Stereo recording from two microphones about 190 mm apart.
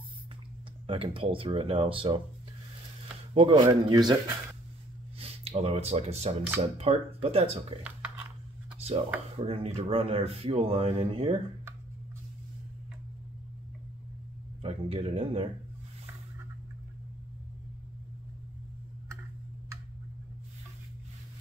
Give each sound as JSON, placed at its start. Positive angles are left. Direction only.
{"t": 0.8, "sound": "speech", "side_deg": -30}
{"t": 3.3, "sound": "speech", "side_deg": -25}
{"t": 5.2, "sound": "speech", "side_deg": -30}
{"t": 8.7, "sound": "a sound", "side_deg": -35}
{"t": 9.4, "sound": "speech", "side_deg": -30}
{"t": 14.6, "sound": "speech", "side_deg": -30}